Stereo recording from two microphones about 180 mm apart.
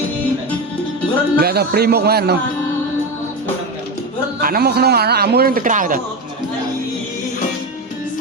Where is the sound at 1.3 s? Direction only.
60° right (ahead or behind).